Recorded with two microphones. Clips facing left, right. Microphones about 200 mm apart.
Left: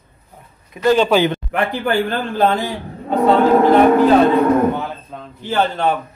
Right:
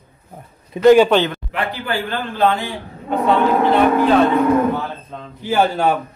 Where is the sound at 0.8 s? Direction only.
15° right (ahead or behind).